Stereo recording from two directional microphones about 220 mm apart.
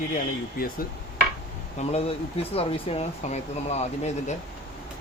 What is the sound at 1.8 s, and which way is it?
Speech, 30° left (ahead or behind).